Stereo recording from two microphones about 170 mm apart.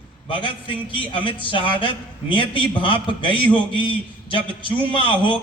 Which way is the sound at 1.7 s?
30° left (ahead or behind).